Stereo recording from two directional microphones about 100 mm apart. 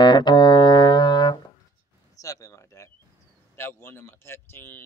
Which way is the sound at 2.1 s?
35° left (ahead or behind).